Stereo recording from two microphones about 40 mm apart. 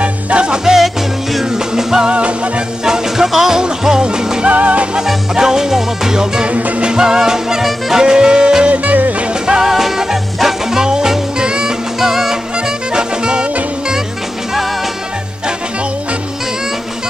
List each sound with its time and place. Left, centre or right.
0.0 s music: right
0.7 s music: centre
2.0 s music: right
2.8 s music: centre
4.5 s music: right
5.0 s music: centre
8.6 s music: right
9.3 s music: right
9.7 s music: centre
12.0 s music: centre
12.5 s music: right